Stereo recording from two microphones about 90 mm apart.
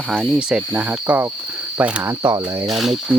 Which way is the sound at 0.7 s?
15° right (ahead or behind).